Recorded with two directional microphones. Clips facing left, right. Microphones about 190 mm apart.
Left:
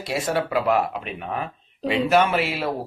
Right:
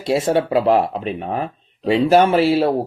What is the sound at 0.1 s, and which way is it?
Speech, 25° right (ahead or behind).